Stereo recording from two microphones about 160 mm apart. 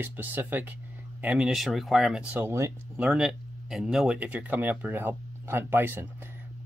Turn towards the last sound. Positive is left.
turn(degrees=-15)  # may be behind; listen again after turning